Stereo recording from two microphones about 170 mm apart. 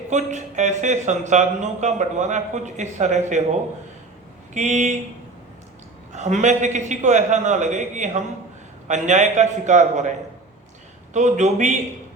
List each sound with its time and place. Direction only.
0.1 s speech: 45° right (ahead or behind)
6.1 s speech: 45° right (ahead or behind)